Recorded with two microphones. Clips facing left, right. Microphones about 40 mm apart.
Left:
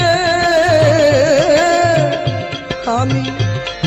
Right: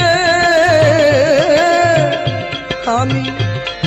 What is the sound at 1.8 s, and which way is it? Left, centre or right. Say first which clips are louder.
Music: right 1 dB; right.